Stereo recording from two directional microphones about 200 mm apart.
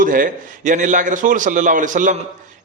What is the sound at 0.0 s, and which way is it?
A man's voice, 45° right (ahead or behind).